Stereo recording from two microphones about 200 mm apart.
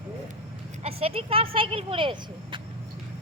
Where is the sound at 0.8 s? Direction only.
30° right (ahead or behind).